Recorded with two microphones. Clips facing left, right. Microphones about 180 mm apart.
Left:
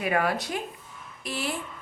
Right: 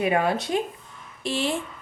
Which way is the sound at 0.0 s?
25° right (ahead or behind).